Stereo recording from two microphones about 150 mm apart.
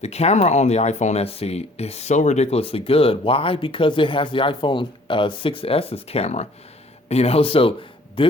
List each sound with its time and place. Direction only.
0.0 s a man's voice: 45° left (ahead or behind)